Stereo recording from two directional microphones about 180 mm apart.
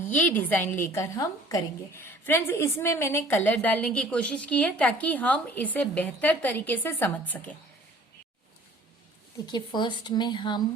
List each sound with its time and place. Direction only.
0.1 s a woman's voice: 10° left (ahead or behind)
9.5 s speech: 25° left (ahead or behind)